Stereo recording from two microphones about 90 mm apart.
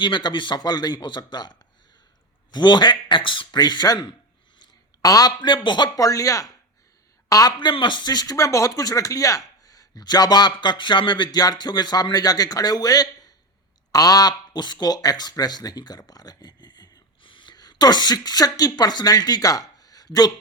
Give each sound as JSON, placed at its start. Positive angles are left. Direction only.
{"t": 0.0, "sound": "speech", "side_deg": 60}
{"t": 4.6, "sound": "a sound", "side_deg": 40}
{"t": 5.4, "sound": "speech", "side_deg": 60}
{"t": 6.0, "sound": "speech", "side_deg": 40}
{"t": 7.6, "sound": "speech", "side_deg": 60}
{"t": 17.2, "sound": "speech", "side_deg": 65}